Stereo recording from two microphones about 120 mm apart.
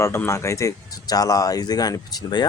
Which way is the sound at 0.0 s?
20° left (ahead or behind).